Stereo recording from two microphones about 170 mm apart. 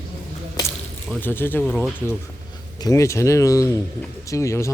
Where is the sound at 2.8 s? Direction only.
20° left (ahead or behind).